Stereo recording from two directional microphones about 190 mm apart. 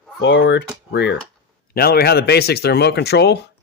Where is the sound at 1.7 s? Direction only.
55° left (ahead or behind).